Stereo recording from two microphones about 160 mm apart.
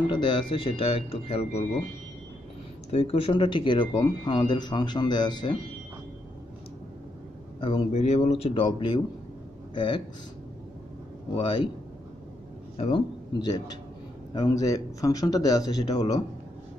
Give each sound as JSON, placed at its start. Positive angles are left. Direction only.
{"t": 0.1, "sound": "speech", "side_deg": 30}
{"t": 2.9, "sound": "speech", "side_deg": 35}
{"t": 7.6, "sound": "speech", "side_deg": 40}
{"t": 11.3, "sound": "speech", "side_deg": 30}
{"t": 12.7, "sound": "a man's voice", "side_deg": 40}
{"t": 13.4, "sound": "speech", "side_deg": 25}